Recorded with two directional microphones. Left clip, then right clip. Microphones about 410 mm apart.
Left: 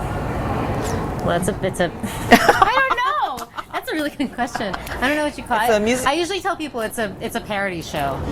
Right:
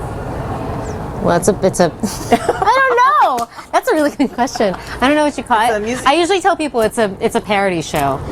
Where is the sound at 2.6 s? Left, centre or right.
Right.